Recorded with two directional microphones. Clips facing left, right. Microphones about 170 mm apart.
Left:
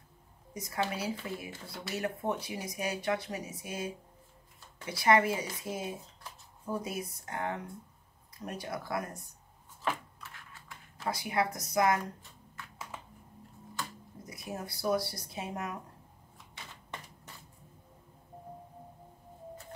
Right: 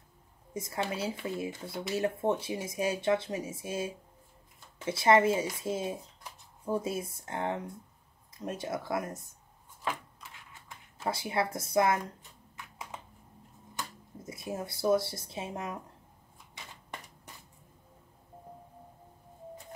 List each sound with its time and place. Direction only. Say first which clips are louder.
0.6 s speech: right 1 dB; 25° right (ahead or behind)
10.3 s a sound: even; 20° right (ahead or behind)
13.7 s speech: even; 25° right (ahead or behind)